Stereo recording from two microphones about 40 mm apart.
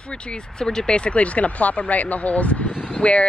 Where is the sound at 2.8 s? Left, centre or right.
Left.